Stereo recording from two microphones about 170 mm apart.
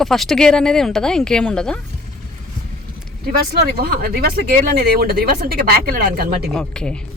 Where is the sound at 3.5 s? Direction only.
65° right (ahead or behind).